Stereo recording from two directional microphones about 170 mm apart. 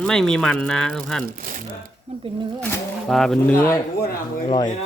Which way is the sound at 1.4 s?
55° right (ahead or behind).